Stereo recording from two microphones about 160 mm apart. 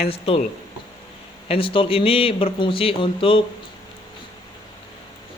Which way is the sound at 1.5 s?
35° left (ahead or behind).